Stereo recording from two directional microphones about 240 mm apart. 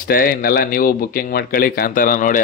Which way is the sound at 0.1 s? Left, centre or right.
Left.